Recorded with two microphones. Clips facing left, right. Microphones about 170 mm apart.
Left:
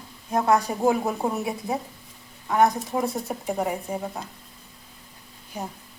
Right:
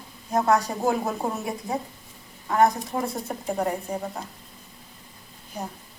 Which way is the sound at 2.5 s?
Centre (ahead or behind).